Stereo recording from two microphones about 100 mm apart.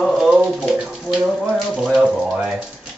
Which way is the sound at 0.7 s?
Centre (ahead or behind).